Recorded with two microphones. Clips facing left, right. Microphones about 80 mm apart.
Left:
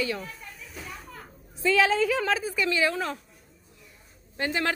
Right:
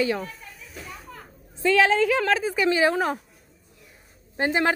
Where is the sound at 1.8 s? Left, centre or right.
Right.